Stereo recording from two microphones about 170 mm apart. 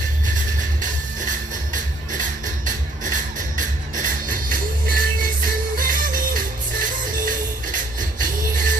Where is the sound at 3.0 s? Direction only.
50° right (ahead or behind).